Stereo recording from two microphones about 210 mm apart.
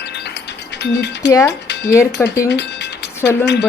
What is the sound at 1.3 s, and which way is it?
Speech, 15° left (ahead or behind).